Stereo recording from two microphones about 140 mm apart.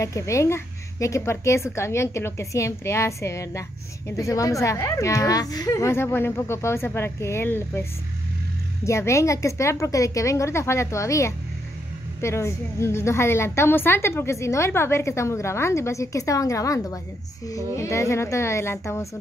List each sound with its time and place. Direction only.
0.0 s a woman's voice: 20° left (ahead or behind)
8.8 s a woman's voice: 20° left (ahead or behind)